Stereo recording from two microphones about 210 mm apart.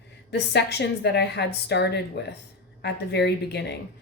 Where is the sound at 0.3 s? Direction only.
55° left (ahead or behind).